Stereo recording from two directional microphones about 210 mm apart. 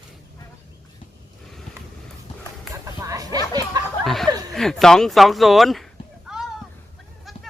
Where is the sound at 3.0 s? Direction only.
15° right (ahead or behind).